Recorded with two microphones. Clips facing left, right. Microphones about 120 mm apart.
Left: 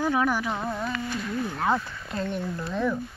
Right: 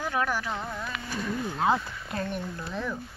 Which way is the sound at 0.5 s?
30° left (ahead or behind).